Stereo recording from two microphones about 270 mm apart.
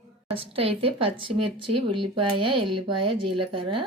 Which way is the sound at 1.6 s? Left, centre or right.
Right.